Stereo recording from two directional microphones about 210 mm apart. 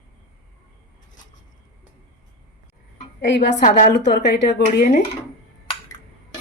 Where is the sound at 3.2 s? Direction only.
55° left (ahead or behind).